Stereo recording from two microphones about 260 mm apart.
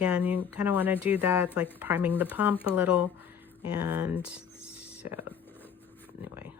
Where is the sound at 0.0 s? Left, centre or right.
Centre.